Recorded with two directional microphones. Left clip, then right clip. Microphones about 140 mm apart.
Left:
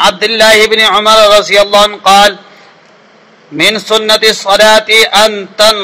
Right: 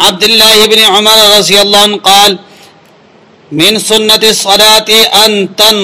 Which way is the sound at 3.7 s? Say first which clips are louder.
Right 3 dB; 45° right (ahead or behind).